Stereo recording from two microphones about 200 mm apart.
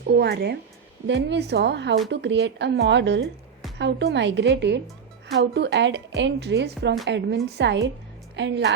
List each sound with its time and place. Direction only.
0.1 s speech: 55° right (ahead or behind)